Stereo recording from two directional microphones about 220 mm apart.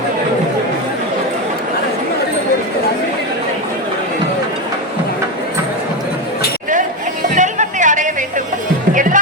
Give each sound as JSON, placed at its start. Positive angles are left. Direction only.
{"t": 7.3, "sound": "music", "side_deg": -35}